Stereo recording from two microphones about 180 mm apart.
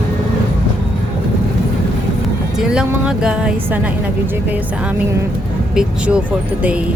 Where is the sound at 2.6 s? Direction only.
5° right (ahead or behind).